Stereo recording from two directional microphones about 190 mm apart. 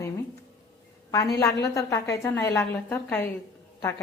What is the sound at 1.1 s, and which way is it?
A woman's voice, 15° left (ahead or behind).